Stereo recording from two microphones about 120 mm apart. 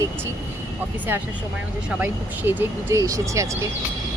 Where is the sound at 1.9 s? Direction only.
15° right (ahead or behind).